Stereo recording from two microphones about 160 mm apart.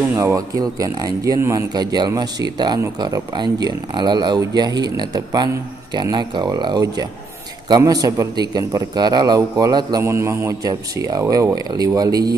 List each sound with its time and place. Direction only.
0.1 s speech: 15° right (ahead or behind)